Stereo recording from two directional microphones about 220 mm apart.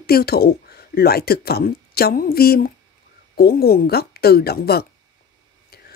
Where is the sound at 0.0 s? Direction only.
45° left (ahead or behind).